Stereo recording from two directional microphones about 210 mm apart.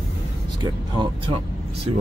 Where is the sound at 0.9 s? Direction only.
20° right (ahead or behind).